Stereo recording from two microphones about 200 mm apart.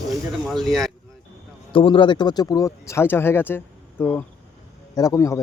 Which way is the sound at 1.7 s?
25° left (ahead or behind).